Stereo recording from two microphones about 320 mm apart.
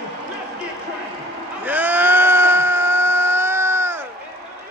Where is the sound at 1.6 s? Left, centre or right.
Centre.